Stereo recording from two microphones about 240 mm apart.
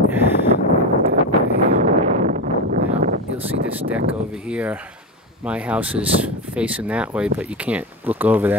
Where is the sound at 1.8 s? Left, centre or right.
Right.